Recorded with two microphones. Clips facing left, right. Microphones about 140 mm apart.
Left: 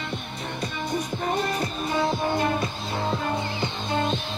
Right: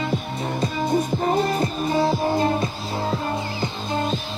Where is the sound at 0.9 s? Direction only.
30° right (ahead or behind).